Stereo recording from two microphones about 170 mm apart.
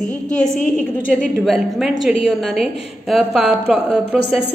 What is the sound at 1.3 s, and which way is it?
A woman's voice, centre (ahead or behind).